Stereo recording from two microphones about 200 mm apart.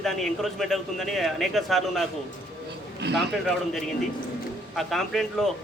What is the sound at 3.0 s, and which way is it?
Speech, 60° right (ahead or behind).